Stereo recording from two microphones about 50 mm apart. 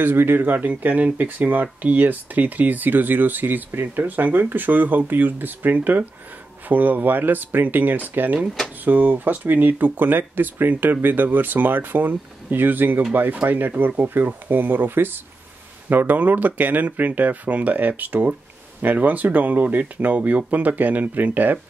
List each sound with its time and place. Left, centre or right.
0.0 s speech: right
0.7 s speech: right